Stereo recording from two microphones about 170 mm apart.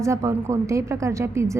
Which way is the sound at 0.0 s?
15° right (ahead or behind).